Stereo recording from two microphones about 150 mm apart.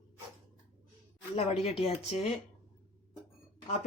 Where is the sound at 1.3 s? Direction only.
45° left (ahead or behind).